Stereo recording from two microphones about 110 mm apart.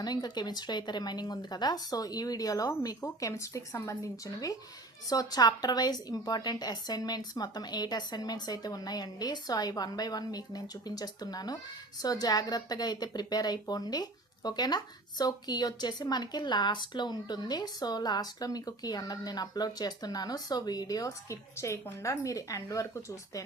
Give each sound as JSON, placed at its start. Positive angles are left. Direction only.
{"t": 0.0, "sound": "speech", "side_deg": 40}